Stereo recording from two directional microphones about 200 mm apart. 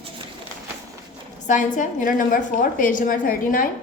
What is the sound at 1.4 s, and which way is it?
A woman's voice, 40° left (ahead or behind).